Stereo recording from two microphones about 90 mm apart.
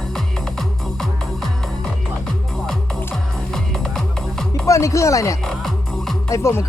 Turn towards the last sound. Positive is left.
turn(degrees=35)  # may be behind; listen again after turning